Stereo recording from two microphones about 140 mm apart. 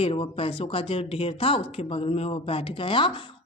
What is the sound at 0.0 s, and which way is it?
Speech, 40° left (ahead or behind).